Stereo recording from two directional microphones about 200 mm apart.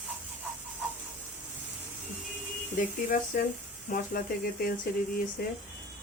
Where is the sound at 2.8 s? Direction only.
45° left (ahead or behind).